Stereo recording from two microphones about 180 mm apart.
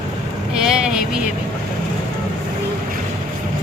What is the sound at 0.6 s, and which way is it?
Vehicle, 5° right (ahead or behind).